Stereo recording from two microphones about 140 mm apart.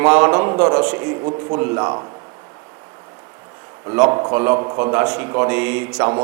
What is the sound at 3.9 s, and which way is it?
A man's voice, 20° right (ahead or behind).